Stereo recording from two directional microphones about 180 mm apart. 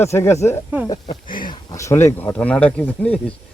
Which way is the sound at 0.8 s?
25° left (ahead or behind).